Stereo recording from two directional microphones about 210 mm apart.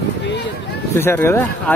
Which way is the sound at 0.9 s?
10° left (ahead or behind).